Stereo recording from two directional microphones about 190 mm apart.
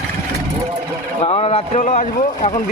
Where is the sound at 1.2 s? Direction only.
30° left (ahead or behind).